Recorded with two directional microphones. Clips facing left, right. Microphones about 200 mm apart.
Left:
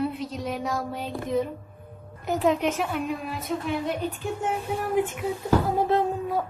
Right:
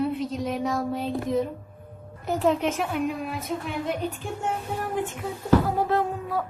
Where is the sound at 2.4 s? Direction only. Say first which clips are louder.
Even; centre (ahead or behind).